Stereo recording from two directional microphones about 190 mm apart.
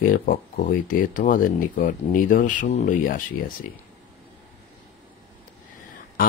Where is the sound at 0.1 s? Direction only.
45° left (ahead or behind).